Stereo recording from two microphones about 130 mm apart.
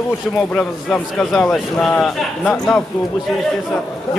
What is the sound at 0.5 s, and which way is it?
Speech, 10° left (ahead or behind).